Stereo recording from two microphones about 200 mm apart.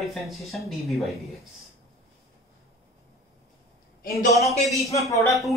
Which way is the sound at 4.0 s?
45° left (ahead or behind).